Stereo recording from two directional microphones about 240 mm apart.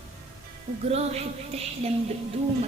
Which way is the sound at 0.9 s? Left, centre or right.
Right.